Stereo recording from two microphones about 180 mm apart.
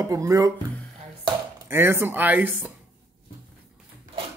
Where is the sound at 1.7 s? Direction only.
15° right (ahead or behind).